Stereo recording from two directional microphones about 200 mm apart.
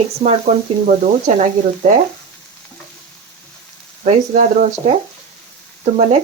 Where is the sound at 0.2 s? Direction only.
35° right (ahead or behind).